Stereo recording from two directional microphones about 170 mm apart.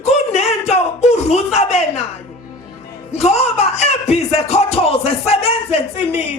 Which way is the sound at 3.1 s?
40° left (ahead or behind).